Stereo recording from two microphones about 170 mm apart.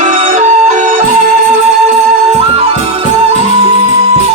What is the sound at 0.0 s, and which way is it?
Music, 45° right (ahead or behind).